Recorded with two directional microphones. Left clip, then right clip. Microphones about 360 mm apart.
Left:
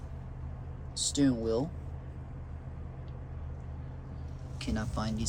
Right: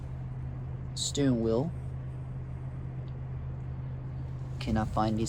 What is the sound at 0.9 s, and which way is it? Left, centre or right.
Speech, centre.